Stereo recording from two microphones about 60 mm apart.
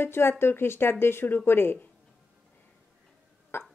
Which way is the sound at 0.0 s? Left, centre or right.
Left.